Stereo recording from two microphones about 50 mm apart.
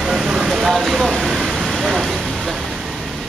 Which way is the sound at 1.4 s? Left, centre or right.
Centre.